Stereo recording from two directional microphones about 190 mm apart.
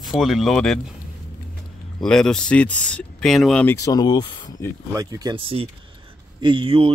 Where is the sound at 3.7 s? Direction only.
20° left (ahead or behind).